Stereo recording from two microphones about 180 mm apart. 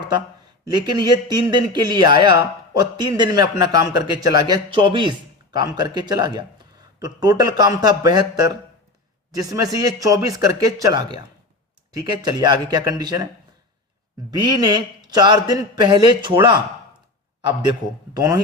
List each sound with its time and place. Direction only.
0.8 s a man's voice: 25° right (ahead or behind)
14.3 s a man's voice: 20° right (ahead or behind)
18.1 s a man's voice: 20° right (ahead or behind)